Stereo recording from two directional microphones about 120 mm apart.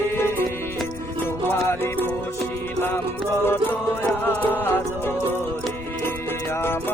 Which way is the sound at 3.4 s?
20° left (ahead or behind).